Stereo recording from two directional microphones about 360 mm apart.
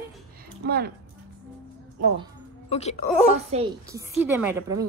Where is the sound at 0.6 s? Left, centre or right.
Right.